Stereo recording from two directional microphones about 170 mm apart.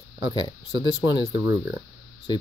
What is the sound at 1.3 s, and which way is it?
Speech, 25° right (ahead or behind).